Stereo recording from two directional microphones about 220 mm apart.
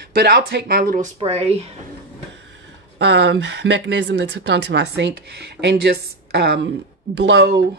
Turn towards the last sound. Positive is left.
turn(degrees=-50)  # may be behind; listen again after turning